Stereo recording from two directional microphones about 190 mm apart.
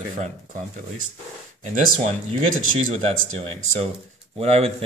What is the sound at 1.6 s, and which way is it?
Speech, 40° right (ahead or behind).